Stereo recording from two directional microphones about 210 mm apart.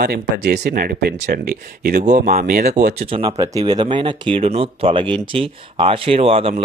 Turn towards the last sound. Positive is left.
turn(degrees=-25)  # may be behind; listen again after turning